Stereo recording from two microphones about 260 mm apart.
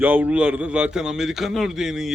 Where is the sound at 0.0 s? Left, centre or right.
Centre.